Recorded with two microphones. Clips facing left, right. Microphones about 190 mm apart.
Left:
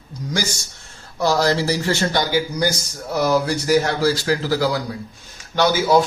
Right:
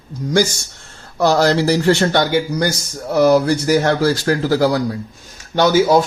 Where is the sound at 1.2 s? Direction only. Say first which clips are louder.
Right 4 dB; 65° right (ahead or behind).